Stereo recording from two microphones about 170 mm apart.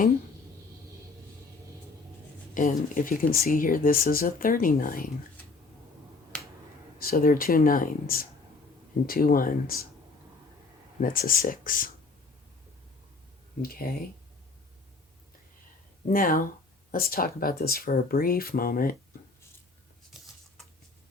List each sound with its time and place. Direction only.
2.6 s speech: 50° left (ahead or behind)
7.0 s speech: 60° left (ahead or behind)
11.0 s speech: 55° left (ahead or behind)
13.6 s speech: 60° left (ahead or behind)
16.0 s speech: 55° left (ahead or behind)